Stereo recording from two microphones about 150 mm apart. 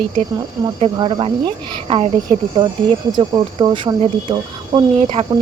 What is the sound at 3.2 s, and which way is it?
Speech, 30° right (ahead or behind).